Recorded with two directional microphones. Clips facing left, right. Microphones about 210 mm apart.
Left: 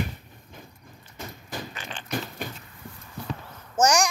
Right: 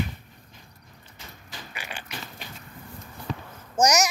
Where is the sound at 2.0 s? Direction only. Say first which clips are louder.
Left 9 dB; 50° left (ahead or behind).